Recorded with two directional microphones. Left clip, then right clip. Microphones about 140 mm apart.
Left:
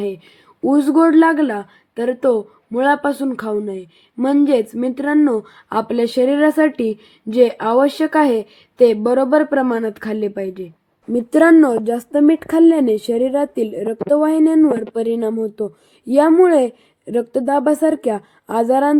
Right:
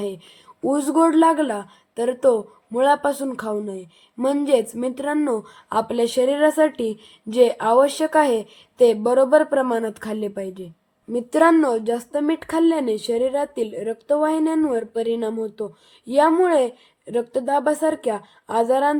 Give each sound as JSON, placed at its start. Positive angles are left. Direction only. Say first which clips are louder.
{"t": 0.6, "sound": "speech", "louder": "left 5 dB", "side_deg": 15}